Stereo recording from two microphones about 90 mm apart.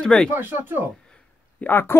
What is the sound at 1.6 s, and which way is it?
Speech, 25° left (ahead or behind).